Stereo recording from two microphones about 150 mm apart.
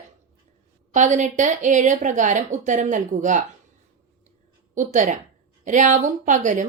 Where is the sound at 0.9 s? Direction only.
55° right (ahead or behind).